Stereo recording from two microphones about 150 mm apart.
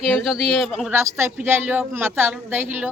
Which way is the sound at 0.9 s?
15° right (ahead or behind).